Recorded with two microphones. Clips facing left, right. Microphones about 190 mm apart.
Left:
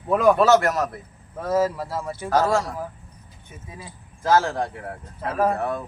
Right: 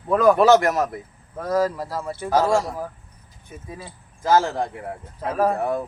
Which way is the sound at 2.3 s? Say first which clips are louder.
Right 1 dB; 15° right (ahead or behind).